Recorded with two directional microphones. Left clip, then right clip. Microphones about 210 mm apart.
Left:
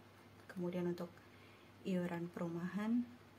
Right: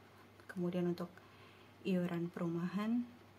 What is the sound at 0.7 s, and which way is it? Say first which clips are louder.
A woman's voice: right 3 dB; 20° right (ahead or behind).